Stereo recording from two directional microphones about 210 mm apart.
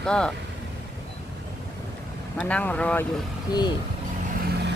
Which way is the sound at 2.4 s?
5° left (ahead or behind).